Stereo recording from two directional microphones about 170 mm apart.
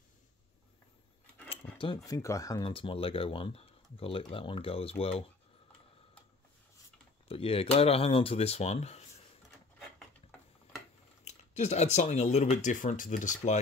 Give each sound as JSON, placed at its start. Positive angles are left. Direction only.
{"t": 1.5, "sound": "a sound", "side_deg": 30}
{"t": 2.0, "sound": "speech", "side_deg": 20}
{"t": 7.2, "sound": "speech", "side_deg": 35}
{"t": 11.2, "sound": "speech", "side_deg": 40}